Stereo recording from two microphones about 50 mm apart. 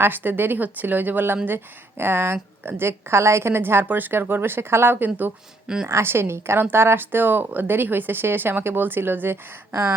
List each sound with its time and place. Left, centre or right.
0.0 s a woman's voice: right
3.8 s a woman's voice: right
5.6 s a woman's voice: centre
5.9 s a woman's voice: right